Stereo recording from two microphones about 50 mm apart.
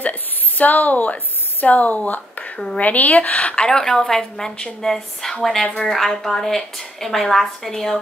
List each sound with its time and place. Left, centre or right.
0.0 s a woman's voice: left
3.6 s a woman's voice: centre
5.9 s a woman's voice: centre